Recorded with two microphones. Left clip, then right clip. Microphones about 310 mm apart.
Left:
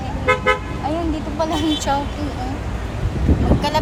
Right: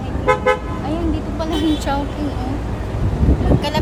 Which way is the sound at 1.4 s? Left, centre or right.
Centre.